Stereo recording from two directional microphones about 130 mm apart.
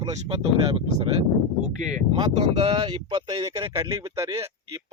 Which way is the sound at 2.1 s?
40° right (ahead or behind).